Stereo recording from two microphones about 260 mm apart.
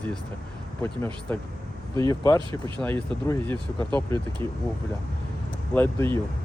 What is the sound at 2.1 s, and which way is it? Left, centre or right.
Speech, centre.